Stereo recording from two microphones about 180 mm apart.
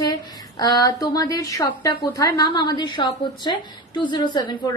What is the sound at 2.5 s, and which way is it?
A woman's voice, 25° left (ahead or behind).